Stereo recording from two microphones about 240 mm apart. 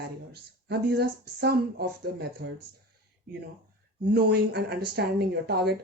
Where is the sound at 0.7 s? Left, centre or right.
Right.